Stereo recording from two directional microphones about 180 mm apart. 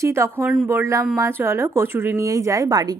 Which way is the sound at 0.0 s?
15° right (ahead or behind).